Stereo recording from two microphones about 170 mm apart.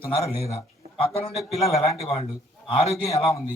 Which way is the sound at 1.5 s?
40° left (ahead or behind).